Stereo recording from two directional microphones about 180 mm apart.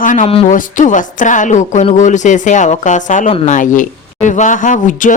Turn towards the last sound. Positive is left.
turn(degrees=45)  # may be behind; listen again after turning